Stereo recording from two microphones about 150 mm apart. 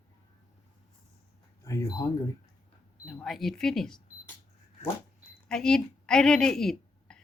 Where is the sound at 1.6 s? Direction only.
20° left (ahead or behind).